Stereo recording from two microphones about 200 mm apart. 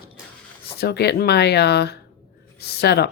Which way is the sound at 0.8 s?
55° left (ahead or behind).